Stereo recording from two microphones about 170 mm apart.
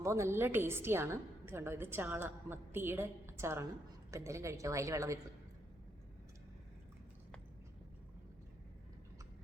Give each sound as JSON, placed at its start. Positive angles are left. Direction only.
{"t": 0.0, "sound": "a woman's voice", "side_deg": -15}